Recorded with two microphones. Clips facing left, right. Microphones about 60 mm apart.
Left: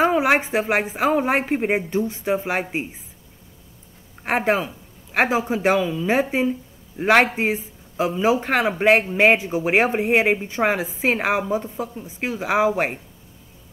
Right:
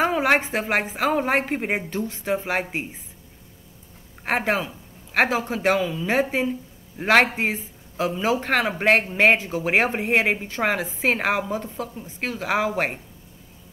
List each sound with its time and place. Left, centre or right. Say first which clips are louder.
0.0 s a sound: left 2 dB; centre
0.4 s a woman's voice: left 3 dB; centre
1.9 s a woman's voice: left 3 dB; centre
4.2 s a woman's voice: left 3 dB; centre
5.8 s a woman's voice: left 2 dB; centre
7.3 s a woman's voice: left 3 dB; centre